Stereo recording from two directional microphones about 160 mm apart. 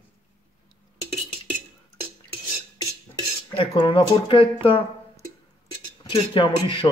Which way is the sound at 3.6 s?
30° left (ahead or behind).